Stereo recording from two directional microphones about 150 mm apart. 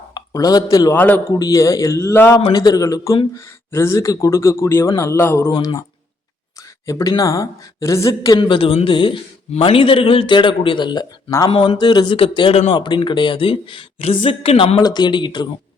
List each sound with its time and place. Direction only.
0.1 s speech: 25° left (ahead or behind)
0.9 s speech: 10° left (ahead or behind)
1.3 s speech: 20° left (ahead or behind)
5.5 s speech: 30° left (ahead or behind)
6.8 s speech: 20° left (ahead or behind)
11.4 s speech: 35° left (ahead or behind)
14.8 s speech: 30° left (ahead or behind)